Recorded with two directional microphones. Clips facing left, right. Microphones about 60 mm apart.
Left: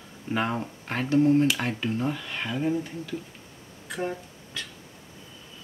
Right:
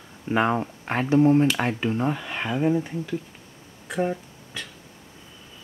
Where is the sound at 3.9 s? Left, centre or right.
Centre.